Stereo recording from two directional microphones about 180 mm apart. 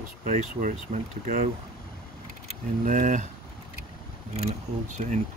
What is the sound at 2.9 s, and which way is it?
Speech, 45° right (ahead or behind).